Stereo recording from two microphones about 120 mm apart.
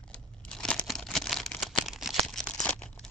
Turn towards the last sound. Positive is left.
turn(degrees=10)  # may be behind; listen again after turning